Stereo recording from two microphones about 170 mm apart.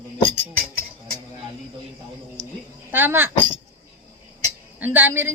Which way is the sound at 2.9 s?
10° right (ahead or behind).